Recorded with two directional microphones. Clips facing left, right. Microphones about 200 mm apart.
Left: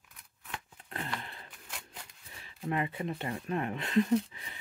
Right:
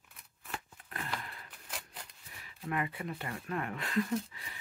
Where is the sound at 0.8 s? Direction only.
25° left (ahead or behind).